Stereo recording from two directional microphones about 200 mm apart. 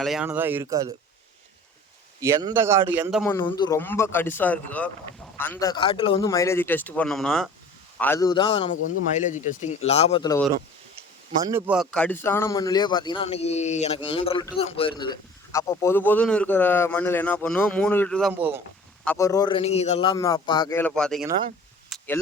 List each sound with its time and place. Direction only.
0.0 s a man's voice: 5° right (ahead or behind)
2.2 s a man's voice: 15° right (ahead or behind)
3.2 s a man's voice: 15° left (ahead or behind)
6.2 s a man's voice: 15° left (ahead or behind)
8.7 s speech: 40° left (ahead or behind)
11.4 s a man's voice: 10° right (ahead or behind)
11.9 s a man's voice: 5° left (ahead or behind)
19.0 s a man's voice: 15° left (ahead or behind)
21.8 s a sound: 5° left (ahead or behind)